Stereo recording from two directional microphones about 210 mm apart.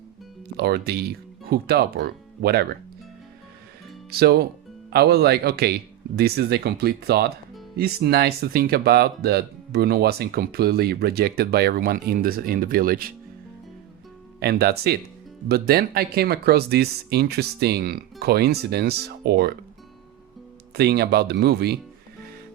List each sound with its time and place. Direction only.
0.5 s speech: 50° right (ahead or behind)
4.1 s speech: 50° right (ahead or behind)
14.3 s speech: 50° right (ahead or behind)
20.7 s speech: 50° right (ahead or behind)